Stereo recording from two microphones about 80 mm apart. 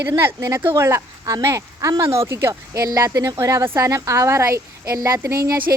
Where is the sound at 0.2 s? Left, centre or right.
Right.